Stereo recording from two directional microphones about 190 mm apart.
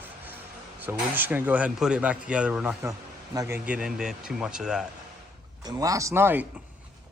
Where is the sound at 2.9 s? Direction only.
15° right (ahead or behind).